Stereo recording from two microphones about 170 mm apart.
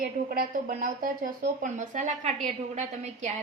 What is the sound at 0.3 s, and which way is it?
A woman's voice, 55° right (ahead or behind).